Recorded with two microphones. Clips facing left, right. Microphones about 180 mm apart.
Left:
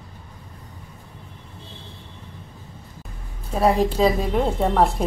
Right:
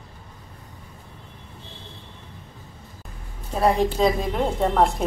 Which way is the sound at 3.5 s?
5° left (ahead or behind).